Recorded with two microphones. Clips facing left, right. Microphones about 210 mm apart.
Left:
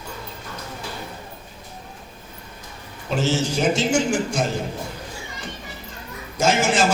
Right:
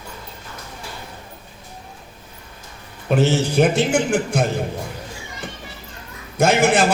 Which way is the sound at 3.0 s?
60° right (ahead or behind).